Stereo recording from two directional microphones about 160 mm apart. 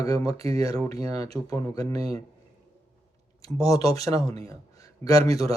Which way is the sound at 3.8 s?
20° left (ahead or behind).